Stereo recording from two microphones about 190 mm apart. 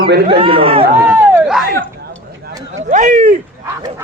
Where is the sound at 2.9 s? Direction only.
40° right (ahead or behind).